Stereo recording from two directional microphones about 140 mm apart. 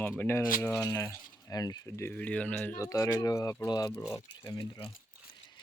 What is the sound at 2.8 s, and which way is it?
Speech, 25° left (ahead or behind).